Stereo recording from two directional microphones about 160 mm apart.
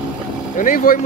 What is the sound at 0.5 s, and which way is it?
Speech, 55° left (ahead or behind).